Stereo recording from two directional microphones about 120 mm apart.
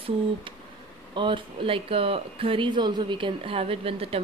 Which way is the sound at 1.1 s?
45° right (ahead or behind).